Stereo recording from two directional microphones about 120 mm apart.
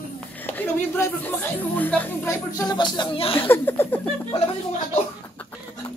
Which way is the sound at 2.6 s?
40° left (ahead or behind).